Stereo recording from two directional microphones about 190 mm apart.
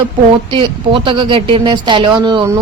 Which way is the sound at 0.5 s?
25° right (ahead or behind).